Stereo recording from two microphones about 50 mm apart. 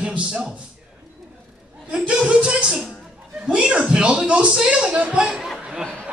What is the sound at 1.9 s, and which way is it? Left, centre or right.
A man's voice, centre.